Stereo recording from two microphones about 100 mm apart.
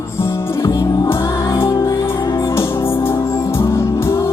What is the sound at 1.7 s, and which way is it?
Music, 40° left (ahead or behind).